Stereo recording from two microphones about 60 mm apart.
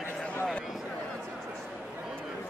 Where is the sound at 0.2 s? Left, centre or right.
Left.